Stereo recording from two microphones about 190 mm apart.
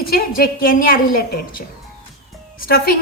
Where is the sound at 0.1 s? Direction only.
50° left (ahead or behind).